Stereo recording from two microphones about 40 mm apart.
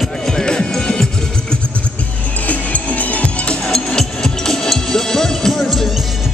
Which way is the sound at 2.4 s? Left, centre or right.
Left.